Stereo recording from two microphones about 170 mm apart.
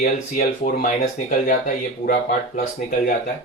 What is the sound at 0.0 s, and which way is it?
A man's voice, 55° left (ahead or behind).